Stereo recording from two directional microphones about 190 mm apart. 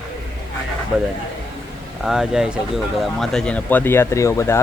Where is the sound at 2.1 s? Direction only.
5° right (ahead or behind).